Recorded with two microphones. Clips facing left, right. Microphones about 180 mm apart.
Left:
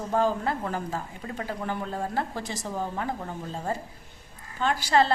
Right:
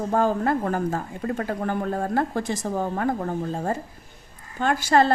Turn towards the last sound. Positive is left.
turn(degrees=-50)  # may be behind; listen again after turning